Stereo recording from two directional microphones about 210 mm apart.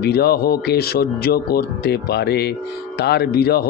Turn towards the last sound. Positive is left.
turn(degrees=50)  # may be behind; listen again after turning